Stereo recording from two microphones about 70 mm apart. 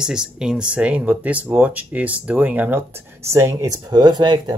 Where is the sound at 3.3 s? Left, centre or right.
Right.